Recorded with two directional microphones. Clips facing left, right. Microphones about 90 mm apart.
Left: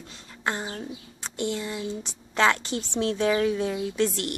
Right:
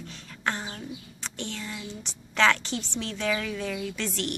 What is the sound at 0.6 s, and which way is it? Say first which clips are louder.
Speech: left 3 dB; 35° left (ahead or behind).